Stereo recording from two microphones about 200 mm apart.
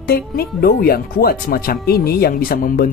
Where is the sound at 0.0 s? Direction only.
50° left (ahead or behind).